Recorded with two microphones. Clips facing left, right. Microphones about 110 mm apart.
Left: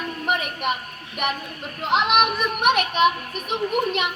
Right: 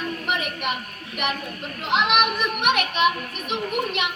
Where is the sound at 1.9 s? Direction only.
40° left (ahead or behind).